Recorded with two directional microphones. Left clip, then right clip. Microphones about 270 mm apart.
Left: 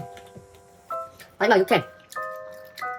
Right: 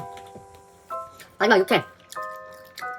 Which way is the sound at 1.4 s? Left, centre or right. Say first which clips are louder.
Even; centre.